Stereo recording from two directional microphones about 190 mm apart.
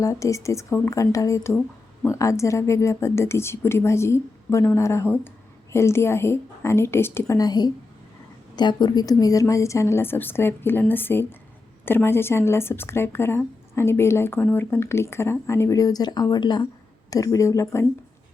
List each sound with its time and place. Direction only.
0.0 s speech: 15° left (ahead or behind)